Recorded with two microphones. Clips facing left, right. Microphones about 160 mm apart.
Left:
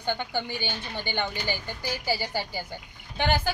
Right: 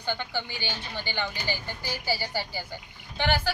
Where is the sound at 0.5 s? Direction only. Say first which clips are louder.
Left 3 dB; 50° left (ahead or behind).